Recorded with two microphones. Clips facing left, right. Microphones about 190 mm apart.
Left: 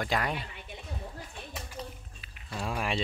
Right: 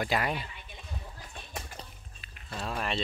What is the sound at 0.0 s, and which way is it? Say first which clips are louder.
Speech: right 1 dB; 5° right (ahead or behind).